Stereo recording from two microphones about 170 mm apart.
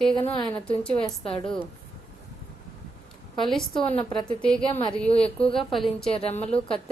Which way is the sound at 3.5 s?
5° left (ahead or behind).